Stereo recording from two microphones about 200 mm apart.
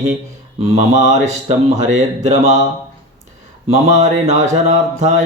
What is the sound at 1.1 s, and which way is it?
Speech, 35° right (ahead or behind).